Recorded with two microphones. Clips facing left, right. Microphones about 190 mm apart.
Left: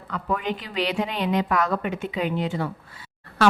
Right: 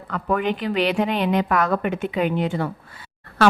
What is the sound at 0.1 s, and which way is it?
A woman's voice, 60° right (ahead or behind).